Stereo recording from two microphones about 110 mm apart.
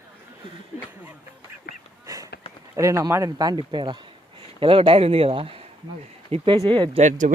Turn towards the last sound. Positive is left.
turn(degrees=-90)